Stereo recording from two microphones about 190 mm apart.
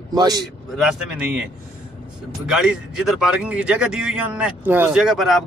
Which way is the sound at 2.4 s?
5° right (ahead or behind).